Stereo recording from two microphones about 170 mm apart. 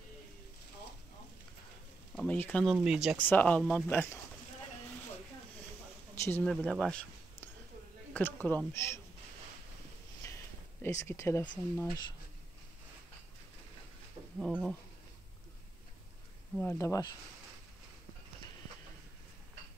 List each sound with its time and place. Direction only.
2.1 s speech: 10° left (ahead or behind)
2.6 s speech: centre (ahead or behind)
3.2 s speech: 10° left (ahead or behind)
6.4 s speech: 5° left (ahead or behind)
8.1 s a sound: 10° left (ahead or behind)
8.5 s speech: 10° left (ahead or behind)
10.2 s a sound: 15° left (ahead or behind)
11.7 s speech: 15° left (ahead or behind)
14.4 s speech: centre (ahead or behind)
16.5 s speech: 15° left (ahead or behind)